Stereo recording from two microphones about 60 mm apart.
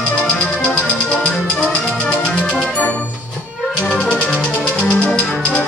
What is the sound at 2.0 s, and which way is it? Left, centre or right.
Music, centre.